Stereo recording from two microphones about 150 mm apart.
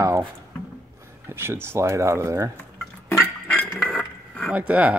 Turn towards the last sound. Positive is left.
turn(degrees=-10)  # may be behind; listen again after turning